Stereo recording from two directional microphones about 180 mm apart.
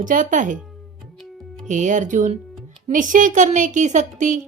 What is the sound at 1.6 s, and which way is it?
Speech, 45° right (ahead or behind).